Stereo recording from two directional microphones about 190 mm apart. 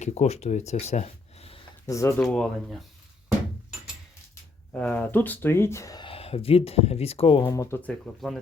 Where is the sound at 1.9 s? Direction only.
15° left (ahead or behind).